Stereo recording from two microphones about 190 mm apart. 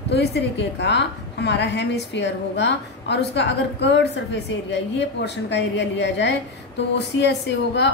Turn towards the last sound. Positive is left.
turn(degrees=65)  # may be behind; listen again after turning